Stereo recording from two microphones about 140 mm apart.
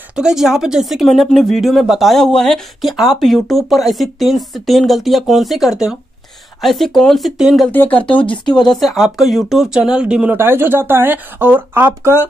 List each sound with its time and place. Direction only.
0.1 s speech: 5° right (ahead or behind)
7.7 s speech: 15° left (ahead or behind)
8.0 s speech: 40° left (ahead or behind)
8.3 s speech: 5° left (ahead or behind); by 12.2 s 15° right (ahead or behind)